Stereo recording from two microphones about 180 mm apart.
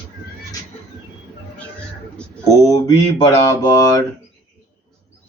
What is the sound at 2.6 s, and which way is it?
Mantra, 25° left (ahead or behind).